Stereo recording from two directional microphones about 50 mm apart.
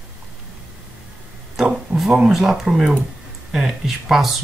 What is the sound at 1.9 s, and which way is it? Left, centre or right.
Speech, centre.